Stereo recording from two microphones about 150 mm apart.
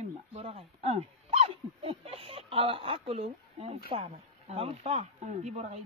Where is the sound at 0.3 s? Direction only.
40° right (ahead or behind).